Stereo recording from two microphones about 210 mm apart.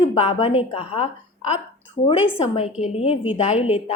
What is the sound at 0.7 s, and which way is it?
Speech, 25° left (ahead or behind).